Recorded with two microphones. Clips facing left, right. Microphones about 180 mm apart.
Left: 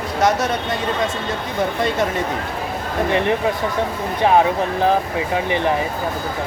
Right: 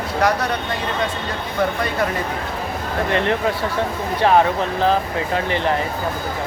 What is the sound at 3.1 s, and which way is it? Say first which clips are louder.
Speech: left 1 dB; 15° left (ahead or behind).